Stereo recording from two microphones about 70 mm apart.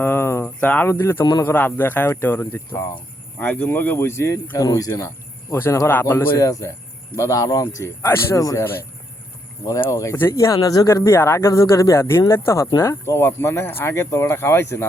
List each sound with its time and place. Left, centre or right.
0.0 s cricket: left
0.6 s speech: left
0.9 s speech: left
1.2 s a man's voice: left
1.5 s speech: left
3.3 s speech: left
4.5 s speech: left
4.9 s cricket: left
5.9 s speech: left
8.4 s speech: left
9.6 s speech: left
10.8 s speech: left